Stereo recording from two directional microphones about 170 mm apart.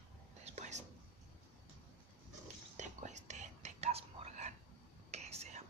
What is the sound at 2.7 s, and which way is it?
Whispering, 45° right (ahead or behind).